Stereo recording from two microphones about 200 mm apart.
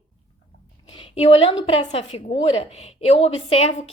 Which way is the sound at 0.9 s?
25° left (ahead or behind).